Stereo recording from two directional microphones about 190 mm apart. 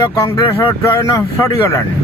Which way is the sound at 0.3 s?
20° left (ahead or behind).